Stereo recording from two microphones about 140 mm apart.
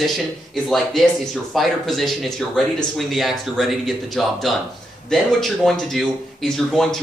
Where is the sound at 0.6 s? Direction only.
Centre (ahead or behind).